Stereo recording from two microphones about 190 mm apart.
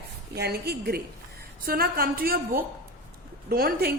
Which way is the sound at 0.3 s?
55° right (ahead or behind).